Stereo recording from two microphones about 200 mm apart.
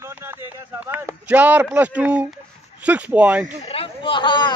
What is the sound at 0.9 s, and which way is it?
Speech, 10° right (ahead or behind).